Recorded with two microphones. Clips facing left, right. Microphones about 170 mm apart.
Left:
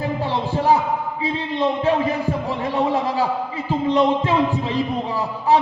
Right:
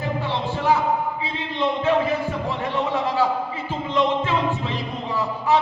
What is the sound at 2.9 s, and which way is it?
A man's voice, 35° left (ahead or behind).